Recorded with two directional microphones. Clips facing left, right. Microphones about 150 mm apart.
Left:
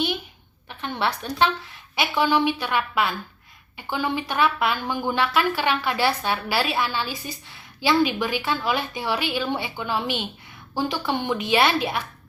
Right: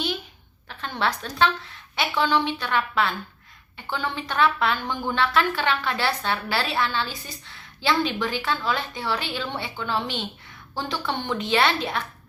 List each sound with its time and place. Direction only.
0.7 s speech: 15° left (ahead or behind)